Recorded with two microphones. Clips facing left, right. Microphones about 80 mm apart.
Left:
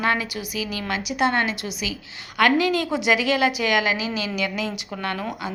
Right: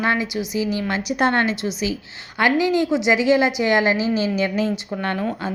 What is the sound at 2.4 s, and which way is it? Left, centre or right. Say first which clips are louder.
A woman's voice: right 1 dB; centre.